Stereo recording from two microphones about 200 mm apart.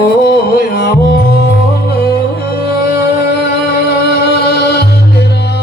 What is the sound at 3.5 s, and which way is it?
Music, 50° left (ahead or behind).